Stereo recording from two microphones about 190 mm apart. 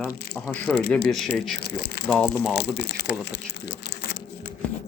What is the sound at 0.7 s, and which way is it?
Speech, centre (ahead or behind).